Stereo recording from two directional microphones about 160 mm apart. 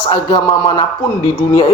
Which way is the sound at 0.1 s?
25° left (ahead or behind).